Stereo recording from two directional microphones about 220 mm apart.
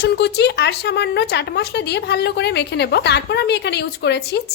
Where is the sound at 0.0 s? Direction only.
50° left (ahead or behind).